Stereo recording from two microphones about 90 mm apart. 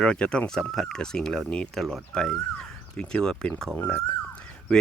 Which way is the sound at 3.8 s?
10° left (ahead or behind).